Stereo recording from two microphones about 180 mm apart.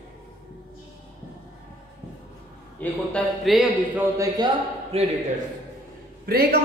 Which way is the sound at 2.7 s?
5° left (ahead or behind).